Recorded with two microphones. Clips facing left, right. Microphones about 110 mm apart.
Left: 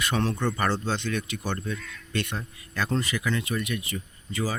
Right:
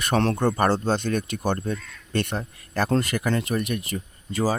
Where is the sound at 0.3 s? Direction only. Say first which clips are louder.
Right 5 dB; 45° right (ahead or behind).